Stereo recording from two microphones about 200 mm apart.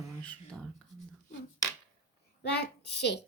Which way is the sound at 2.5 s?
55° left (ahead or behind).